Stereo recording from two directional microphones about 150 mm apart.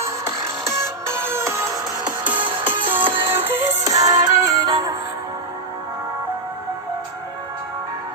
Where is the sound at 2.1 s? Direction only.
10° right (ahead or behind).